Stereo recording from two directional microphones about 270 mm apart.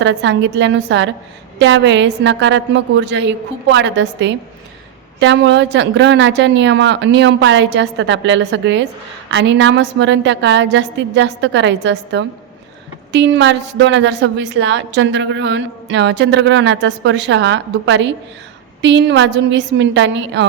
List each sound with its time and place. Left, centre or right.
0.0 s a woman's voice: right